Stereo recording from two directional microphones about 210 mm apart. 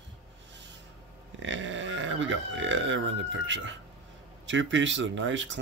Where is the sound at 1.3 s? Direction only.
60° right (ahead or behind).